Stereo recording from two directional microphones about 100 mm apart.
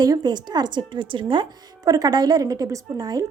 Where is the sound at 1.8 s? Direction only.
40° right (ahead or behind).